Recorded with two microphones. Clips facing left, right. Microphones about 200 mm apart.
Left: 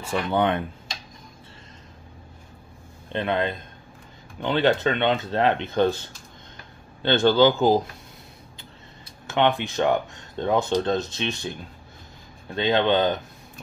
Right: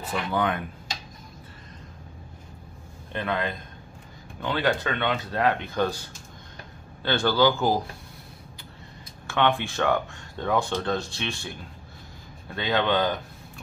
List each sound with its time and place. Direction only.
0.1 s speech: 25° left (ahead or behind)
3.1 s speech: 25° left (ahead or behind)
7.0 s speech: 25° left (ahead or behind)
9.3 s speech: 20° left (ahead or behind)
12.5 s speech: 25° left (ahead or behind)